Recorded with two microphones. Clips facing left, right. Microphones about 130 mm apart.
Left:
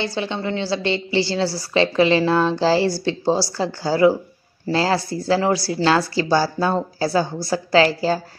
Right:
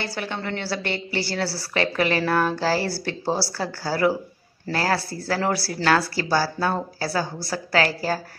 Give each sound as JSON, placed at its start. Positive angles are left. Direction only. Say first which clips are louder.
{"t": 0.0, "sound": "a woman's voice", "louder": "left 5 dB", "side_deg": 20}